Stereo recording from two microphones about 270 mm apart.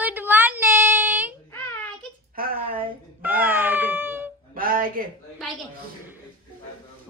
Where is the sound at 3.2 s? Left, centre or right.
Centre.